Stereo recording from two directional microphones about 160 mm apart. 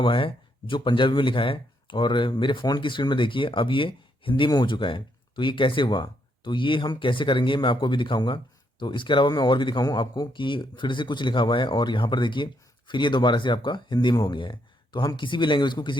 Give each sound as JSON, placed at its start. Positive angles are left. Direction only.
{"t": 0.0, "sound": "speech", "side_deg": 30}